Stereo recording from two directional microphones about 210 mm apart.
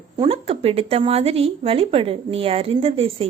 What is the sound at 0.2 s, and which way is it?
A woman's voice, 25° right (ahead or behind).